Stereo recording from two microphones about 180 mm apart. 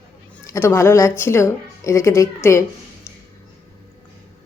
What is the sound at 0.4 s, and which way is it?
Speech, 15° left (ahead or behind).